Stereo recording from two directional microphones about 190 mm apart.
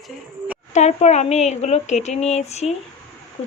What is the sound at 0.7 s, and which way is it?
Speech, 35° left (ahead or behind).